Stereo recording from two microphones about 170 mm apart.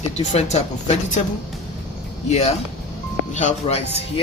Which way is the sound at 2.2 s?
40° left (ahead or behind).